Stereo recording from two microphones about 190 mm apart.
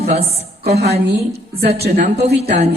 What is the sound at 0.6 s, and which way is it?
A woman's voice, 35° right (ahead or behind).